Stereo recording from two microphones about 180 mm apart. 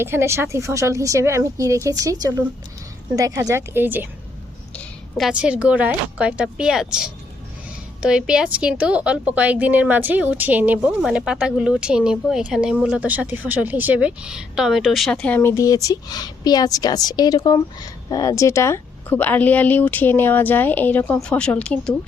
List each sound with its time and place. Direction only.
0.0 s a woman's voice: 15° right (ahead or behind)
4.7 s a woman's voice: 5° left (ahead or behind)
15.4 s a woman's voice: 15° left (ahead or behind)